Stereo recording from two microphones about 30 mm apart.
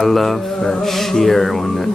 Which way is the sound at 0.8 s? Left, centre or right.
Centre.